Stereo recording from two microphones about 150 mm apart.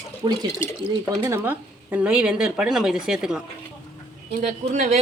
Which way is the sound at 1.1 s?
15° right (ahead or behind).